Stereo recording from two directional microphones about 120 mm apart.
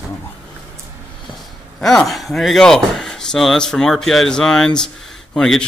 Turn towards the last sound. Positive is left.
turn(degrees=5)  # may be behind; listen again after turning